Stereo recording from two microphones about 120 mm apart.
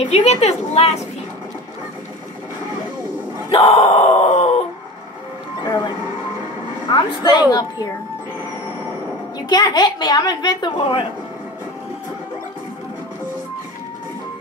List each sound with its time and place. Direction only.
0.0 s a woman's voice: 60° left (ahead or behind)
3.5 s a sound: 55° left (ahead or behind)
6.9 s a woman's voice: 35° left (ahead or behind)
9.5 s a woman's voice: 35° left (ahead or behind)